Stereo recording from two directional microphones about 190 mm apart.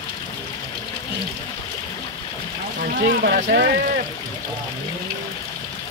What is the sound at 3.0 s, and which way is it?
Speech, 50° right (ahead or behind).